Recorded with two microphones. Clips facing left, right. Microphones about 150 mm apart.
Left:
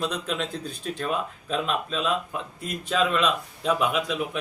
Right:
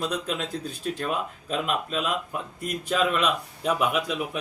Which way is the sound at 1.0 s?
5° right (ahead or behind).